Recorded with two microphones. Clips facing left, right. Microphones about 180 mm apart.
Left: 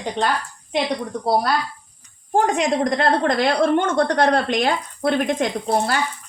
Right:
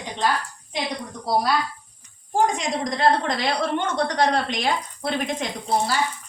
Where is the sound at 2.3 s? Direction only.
60° left (ahead or behind).